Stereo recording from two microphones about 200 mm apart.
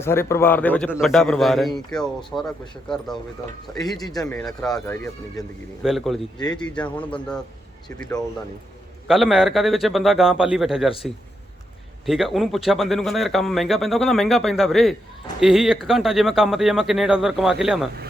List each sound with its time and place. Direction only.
0.0 s speech: 10° left (ahead or behind)
3.7 s speech: 15° left (ahead or behind)
9.0 s speech: centre (ahead or behind)
12.0 s speech: centre (ahead or behind)